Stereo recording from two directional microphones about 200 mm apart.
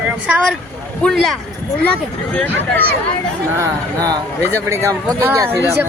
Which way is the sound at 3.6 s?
15° right (ahead or behind).